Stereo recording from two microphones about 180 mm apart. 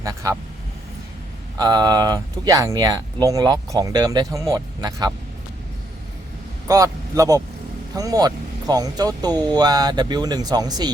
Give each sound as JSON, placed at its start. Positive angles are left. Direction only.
{"t": 0.0, "sound": "speech", "side_deg": -20}
{"t": 1.5, "sound": "speech", "side_deg": -20}
{"t": 6.7, "sound": "speech", "side_deg": -20}